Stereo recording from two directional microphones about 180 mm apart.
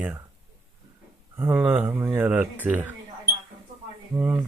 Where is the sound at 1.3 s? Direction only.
10° right (ahead or behind).